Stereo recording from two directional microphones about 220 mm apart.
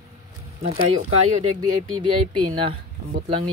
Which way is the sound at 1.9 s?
90° right.